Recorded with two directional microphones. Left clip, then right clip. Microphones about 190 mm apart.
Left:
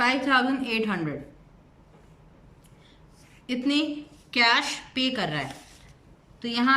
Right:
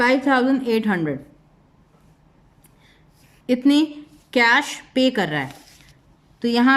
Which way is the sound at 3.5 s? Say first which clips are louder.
Right 8 dB; 40° right (ahead or behind).